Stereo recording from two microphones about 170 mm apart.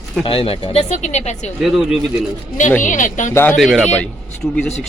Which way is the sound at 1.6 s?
5° right (ahead or behind).